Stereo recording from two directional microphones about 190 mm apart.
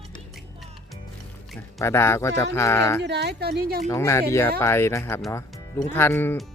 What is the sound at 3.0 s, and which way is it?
Speech, 60° right (ahead or behind).